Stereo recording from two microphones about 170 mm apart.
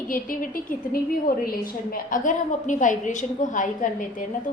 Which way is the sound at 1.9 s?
50° left (ahead or behind).